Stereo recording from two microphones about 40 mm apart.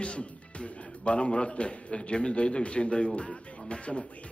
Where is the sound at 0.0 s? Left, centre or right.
Left.